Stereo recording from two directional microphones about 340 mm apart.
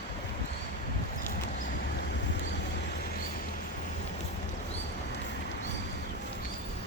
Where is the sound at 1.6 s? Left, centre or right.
Left.